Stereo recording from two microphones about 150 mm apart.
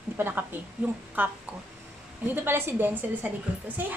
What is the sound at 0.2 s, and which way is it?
Speech, 15° right (ahead or behind).